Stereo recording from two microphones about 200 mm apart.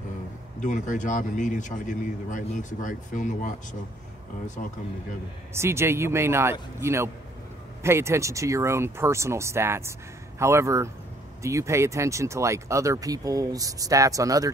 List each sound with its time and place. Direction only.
0.6 s speech: 40° left (ahead or behind)
4.6 s speech: 40° left (ahead or behind)
5.5 s speech: 15° right (ahead or behind)